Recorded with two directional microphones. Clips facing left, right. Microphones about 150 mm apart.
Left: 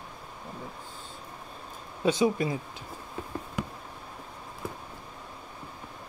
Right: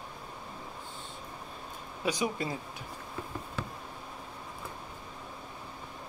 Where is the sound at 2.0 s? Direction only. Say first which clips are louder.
Left 7 dB; 25° left (ahead or behind).